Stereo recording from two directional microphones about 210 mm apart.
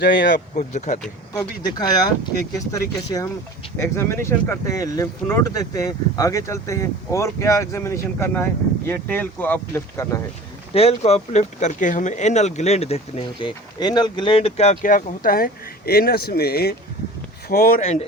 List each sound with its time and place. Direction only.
0.0 s speech: 55° left (ahead or behind)
0.3 s speech: 35° left (ahead or behind)
1.3 s speech: 20° left (ahead or behind)
10.8 s speech: 30° left (ahead or behind); by 17.8 s 45° left (ahead or behind)